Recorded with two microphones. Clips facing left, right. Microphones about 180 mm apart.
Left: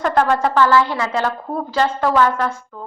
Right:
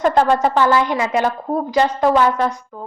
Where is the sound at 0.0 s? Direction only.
25° right (ahead or behind).